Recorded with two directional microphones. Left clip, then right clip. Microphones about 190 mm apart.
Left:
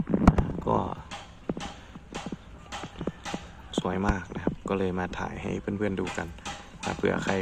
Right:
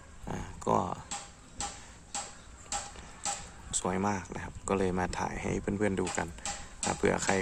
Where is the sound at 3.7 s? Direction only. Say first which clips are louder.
Left 3 dB; 20° right (ahead or behind).